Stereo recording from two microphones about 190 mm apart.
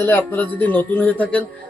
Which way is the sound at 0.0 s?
10° left (ahead or behind).